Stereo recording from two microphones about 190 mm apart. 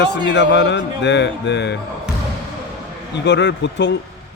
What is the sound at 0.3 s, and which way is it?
Speech, 65° left (ahead or behind).